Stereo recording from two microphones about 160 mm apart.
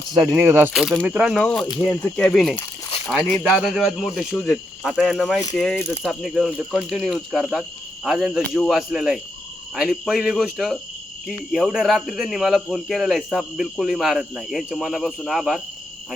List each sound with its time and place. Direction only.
0.1 s speech: 25° right (ahead or behind)
0.7 s speech: centre (ahead or behind)
1.4 s speech: 5° left (ahead or behind)